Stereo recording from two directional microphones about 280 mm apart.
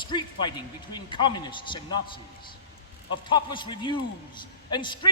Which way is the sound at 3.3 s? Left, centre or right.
Centre.